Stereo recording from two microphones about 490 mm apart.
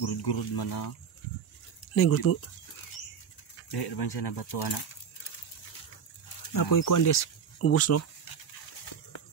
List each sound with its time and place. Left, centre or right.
0.0 s speech: left
2.0 s speech: left
3.7 s speech: left
6.5 s speech: left